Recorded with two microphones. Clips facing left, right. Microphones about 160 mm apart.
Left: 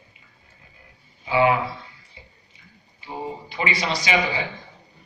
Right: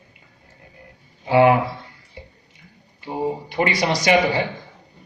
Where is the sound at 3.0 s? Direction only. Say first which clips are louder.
Right 7 dB; 60° right (ahead or behind).